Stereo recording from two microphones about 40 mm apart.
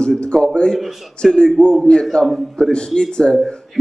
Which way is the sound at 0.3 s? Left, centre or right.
Centre.